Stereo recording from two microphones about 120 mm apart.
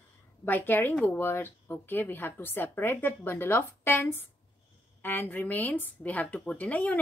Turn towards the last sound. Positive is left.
turn(degrees=10)  # may be behind; listen again after turning